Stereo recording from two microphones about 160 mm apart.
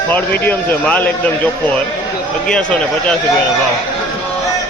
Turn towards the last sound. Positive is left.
turn(degrees=5)  # may be behind; listen again after turning